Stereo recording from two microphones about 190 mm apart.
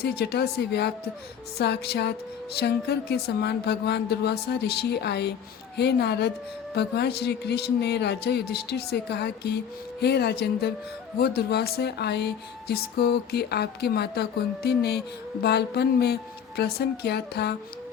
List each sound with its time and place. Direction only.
0.0 s music: 55° left (ahead or behind)